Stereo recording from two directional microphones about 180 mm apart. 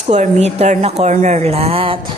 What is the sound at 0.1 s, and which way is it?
A woman's voice, 40° right (ahead or behind).